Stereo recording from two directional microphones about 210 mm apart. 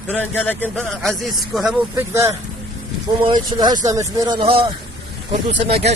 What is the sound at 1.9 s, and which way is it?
Speech, 15° right (ahead or behind).